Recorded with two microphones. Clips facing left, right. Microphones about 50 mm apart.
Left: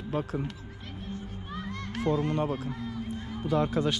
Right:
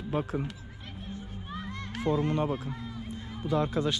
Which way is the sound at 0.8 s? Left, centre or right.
Right.